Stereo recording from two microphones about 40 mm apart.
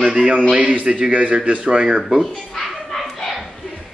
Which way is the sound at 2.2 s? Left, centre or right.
Centre.